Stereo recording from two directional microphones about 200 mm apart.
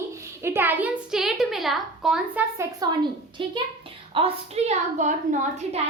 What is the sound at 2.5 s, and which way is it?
A woman's voice, 15° right (ahead or behind).